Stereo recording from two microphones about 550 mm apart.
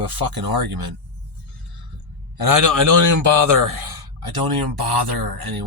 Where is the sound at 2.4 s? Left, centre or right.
Right.